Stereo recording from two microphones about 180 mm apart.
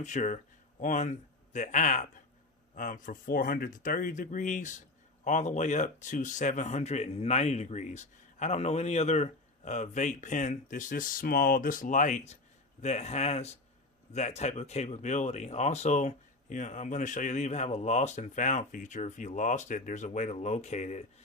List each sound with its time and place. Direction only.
0.0 s speech: 40° left (ahead or behind)